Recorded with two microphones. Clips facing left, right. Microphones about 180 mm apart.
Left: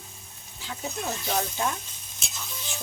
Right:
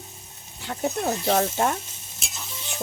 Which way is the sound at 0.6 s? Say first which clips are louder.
Right 7 dB; 65° right (ahead or behind).